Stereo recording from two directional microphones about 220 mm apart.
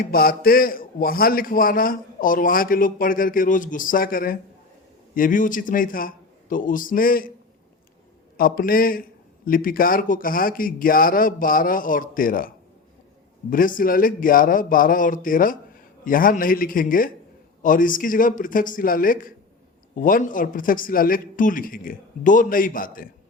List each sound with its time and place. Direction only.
0.0 s a man's voice: 40° left (ahead or behind)
8.4 s a man's voice: 40° left (ahead or behind)